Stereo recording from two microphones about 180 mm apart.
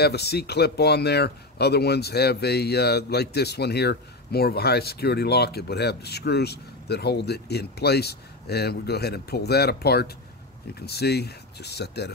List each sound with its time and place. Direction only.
0.0 s speech: 65° left (ahead or behind)